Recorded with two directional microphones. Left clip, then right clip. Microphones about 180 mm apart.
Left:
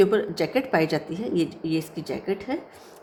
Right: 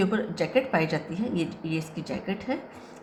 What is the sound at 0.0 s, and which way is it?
A woman's voice, 35° left (ahead or behind).